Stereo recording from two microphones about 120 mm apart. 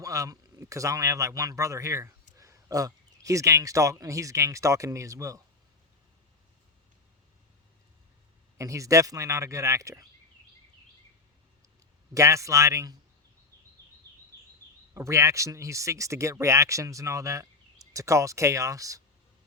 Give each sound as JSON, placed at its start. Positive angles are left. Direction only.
{"t": 0.0, "sound": "speech", "side_deg": -25}
{"t": 8.5, "sound": "speech", "side_deg": -25}
{"t": 12.1, "sound": "speech", "side_deg": -25}
{"t": 14.9, "sound": "speech", "side_deg": -25}